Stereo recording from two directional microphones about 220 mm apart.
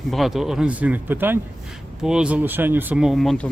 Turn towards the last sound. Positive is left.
turn(degrees=0)  # may be behind; listen again after turning